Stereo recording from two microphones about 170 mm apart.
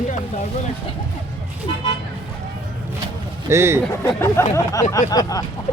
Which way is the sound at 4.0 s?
15° left (ahead or behind).